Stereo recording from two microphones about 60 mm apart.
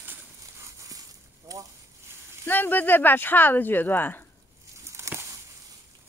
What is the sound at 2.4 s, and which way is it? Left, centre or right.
Speech, left.